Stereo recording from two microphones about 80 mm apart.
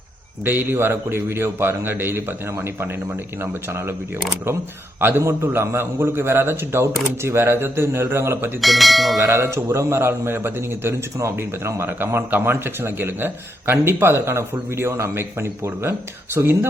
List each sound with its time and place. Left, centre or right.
0.4 s a man's voice: right
8.6 s speech: centre
9.3 s a man's voice: right